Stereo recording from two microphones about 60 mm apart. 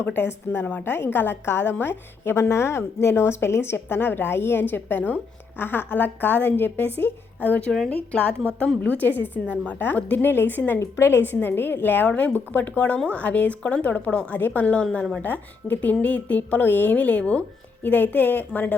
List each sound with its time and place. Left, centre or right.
0.0 s a woman's voice: left
0.6 s a woman's voice: left
0.9 s a woman's voice: left
10.8 s a woman's voice: left